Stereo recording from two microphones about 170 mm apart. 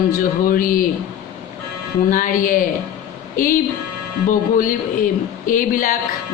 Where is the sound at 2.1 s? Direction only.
50° left (ahead or behind).